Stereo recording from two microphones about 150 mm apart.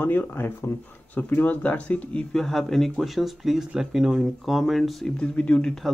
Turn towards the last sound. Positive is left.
turn(degrees=5)  # may be behind; listen again after turning